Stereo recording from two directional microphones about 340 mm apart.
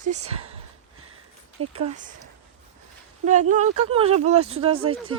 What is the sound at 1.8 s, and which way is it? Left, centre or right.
Speech, right.